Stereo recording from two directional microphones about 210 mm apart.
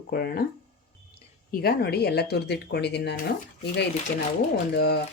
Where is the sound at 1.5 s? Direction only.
50° left (ahead or behind).